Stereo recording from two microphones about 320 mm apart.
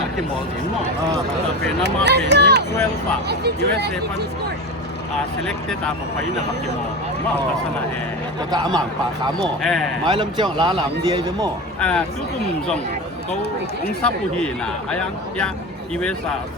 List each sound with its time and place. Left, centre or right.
1.8 s speech: right
8.4 s speech: centre
9.4 s speech: centre
10.1 s speech: centre
11.8 s speech: centre
14.0 s speech: centre